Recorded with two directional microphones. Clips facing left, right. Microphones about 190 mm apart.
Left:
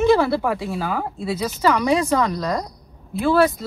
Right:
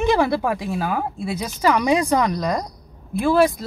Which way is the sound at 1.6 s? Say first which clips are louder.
Right 1 dB; 15° right (ahead or behind).